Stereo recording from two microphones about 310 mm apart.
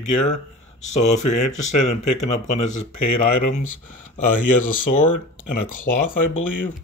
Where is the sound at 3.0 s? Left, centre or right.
Left.